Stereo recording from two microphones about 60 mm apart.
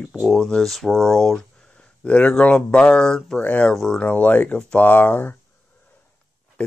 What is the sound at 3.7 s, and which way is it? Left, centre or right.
Speech, centre.